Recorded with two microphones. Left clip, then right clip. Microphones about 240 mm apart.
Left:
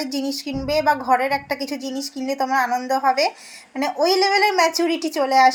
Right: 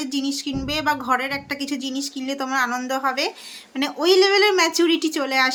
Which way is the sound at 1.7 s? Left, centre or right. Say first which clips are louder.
Even; right.